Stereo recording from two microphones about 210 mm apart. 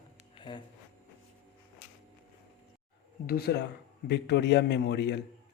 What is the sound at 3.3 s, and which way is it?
A man's voice, 50° left (ahead or behind).